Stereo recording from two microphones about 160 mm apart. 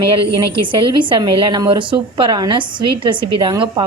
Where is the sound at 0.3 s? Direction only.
30° right (ahead or behind).